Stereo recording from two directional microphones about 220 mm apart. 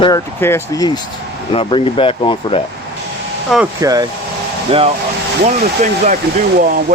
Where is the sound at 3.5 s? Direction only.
Centre (ahead or behind).